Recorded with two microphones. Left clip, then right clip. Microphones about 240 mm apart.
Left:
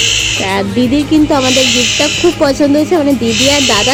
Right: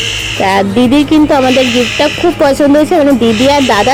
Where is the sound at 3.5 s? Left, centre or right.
Centre.